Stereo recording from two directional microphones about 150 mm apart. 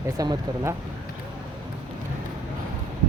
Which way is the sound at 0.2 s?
20° right (ahead or behind).